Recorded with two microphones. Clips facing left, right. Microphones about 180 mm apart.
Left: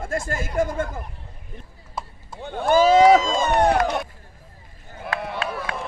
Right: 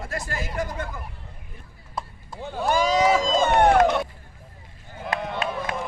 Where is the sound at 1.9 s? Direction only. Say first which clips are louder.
Even; centre (ahead or behind).